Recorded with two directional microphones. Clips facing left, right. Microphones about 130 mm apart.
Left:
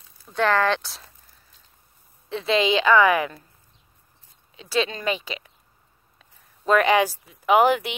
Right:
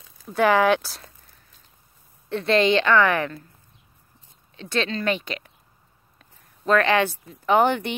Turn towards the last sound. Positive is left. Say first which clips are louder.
# left 1 dB
turn(degrees=5)  # may be behind; listen again after turning